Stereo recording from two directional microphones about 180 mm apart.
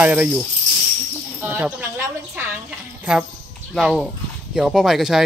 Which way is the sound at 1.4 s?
10° right (ahead or behind).